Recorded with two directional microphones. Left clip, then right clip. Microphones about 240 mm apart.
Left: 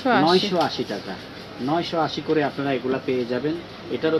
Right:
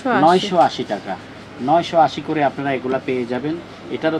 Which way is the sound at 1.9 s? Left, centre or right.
Right.